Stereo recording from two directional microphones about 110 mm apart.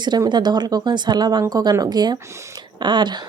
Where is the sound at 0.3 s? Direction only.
40° right (ahead or behind).